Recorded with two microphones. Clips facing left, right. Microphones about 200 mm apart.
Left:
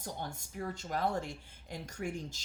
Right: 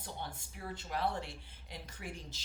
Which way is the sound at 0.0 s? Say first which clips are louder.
Left 3 dB; 45° left (ahead or behind).